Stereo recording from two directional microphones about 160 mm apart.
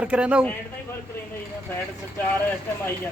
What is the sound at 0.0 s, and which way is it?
Speech, 10° right (ahead or behind).